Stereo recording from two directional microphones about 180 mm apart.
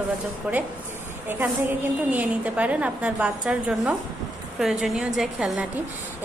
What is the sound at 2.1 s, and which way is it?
A woman's voice, 10° right (ahead or behind).